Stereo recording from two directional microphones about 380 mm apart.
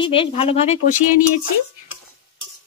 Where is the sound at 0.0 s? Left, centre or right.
Centre.